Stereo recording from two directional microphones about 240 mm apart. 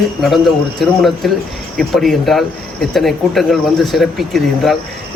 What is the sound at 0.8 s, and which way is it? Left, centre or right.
Speech, centre.